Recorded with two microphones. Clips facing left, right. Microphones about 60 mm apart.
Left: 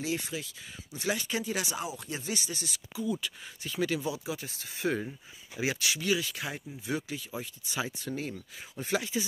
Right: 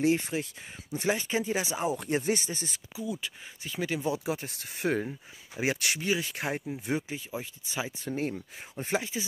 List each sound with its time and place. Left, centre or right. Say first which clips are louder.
0.0 s speech: right 7 dB; right
0.9 s speech: right 4 dB; right
1.9 s speech: right 8 dB; right
3.0 s speech: left 2 dB; centre
4.0 s speech: right 4 dB; right
5.9 s speech: even; right
6.9 s speech: right 1 dB; right
8.2 s speech: right 5 dB; right